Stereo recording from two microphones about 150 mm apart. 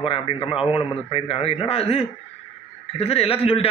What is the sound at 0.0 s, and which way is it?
A man's voice, 35° left (ahead or behind).